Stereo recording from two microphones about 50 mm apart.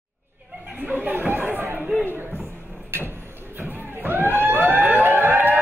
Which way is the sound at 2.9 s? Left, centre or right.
Right.